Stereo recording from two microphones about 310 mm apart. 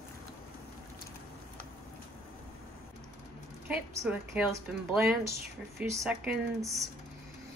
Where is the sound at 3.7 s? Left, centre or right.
Centre.